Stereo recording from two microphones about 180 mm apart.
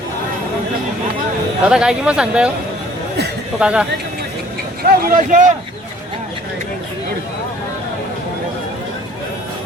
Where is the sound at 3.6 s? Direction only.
5° right (ahead or behind).